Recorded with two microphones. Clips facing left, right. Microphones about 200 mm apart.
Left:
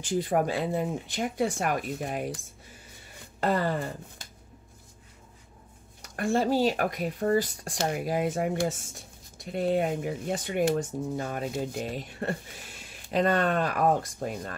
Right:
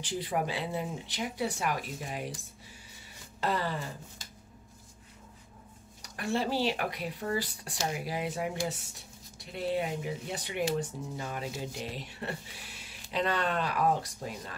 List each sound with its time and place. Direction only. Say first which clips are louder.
0.0 s speech: left 6 dB; 50° left (ahead or behind)
6.0 s speech: left 6 dB; 50° left (ahead or behind)